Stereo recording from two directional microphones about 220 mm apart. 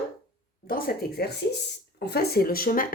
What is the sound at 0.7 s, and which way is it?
Speech, 45° left (ahead or behind).